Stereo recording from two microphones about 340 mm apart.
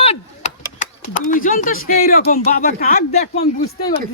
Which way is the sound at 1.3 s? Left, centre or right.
Left.